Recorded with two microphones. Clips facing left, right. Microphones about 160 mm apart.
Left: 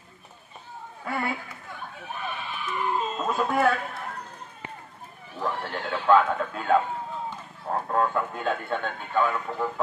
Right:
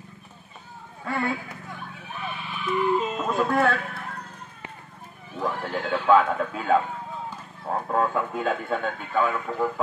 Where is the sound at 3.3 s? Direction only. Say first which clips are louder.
Right 1 dB; centre (ahead or behind).